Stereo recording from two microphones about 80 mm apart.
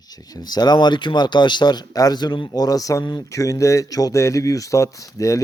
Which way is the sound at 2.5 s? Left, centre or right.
Left.